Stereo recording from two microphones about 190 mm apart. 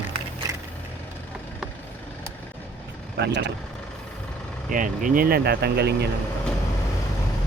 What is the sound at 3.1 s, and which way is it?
Speech, 65° right (ahead or behind).